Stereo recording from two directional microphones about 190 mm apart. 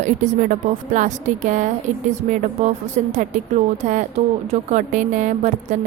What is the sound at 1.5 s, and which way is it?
Speech, 40° right (ahead or behind).